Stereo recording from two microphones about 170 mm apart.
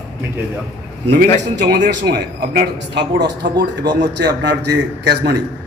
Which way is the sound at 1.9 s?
70° right (ahead or behind).